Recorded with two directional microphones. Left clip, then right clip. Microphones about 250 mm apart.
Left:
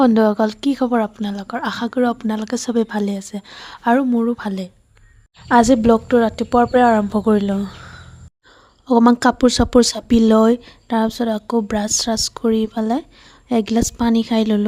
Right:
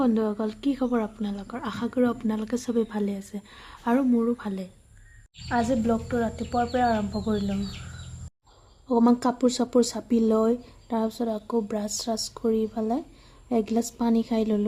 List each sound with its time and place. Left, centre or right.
0.0 s speech: left
8.9 s speech: left